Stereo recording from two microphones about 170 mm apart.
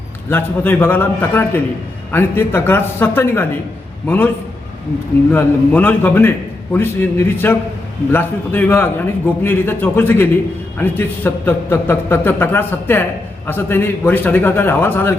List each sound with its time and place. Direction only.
0.3 s a man's voice: 10° left (ahead or behind)
5.3 s a man's voice: 10° left (ahead or behind)